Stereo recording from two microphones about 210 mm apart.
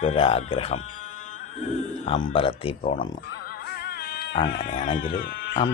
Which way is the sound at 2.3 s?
25° left (ahead or behind).